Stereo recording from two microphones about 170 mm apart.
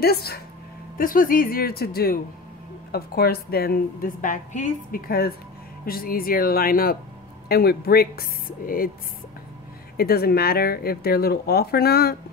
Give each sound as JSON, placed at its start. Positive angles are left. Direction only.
{"t": 0.0, "sound": "a woman's voice", "side_deg": 65}
{"t": 0.9, "sound": "a woman's voice", "side_deg": 55}
{"t": 9.9, "sound": "a woman's voice", "side_deg": 65}